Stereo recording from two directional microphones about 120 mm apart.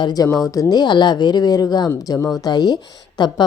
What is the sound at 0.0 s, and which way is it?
A woman's voice, 35° left (ahead or behind).